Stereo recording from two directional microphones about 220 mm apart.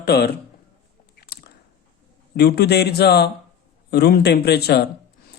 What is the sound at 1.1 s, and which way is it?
Biting, 45° left (ahead or behind).